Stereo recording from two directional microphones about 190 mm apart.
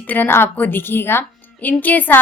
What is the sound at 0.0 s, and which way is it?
Speech, 10° left (ahead or behind).